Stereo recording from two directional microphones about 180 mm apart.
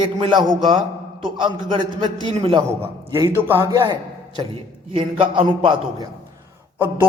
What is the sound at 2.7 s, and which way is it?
A man's voice, 15° right (ahead or behind).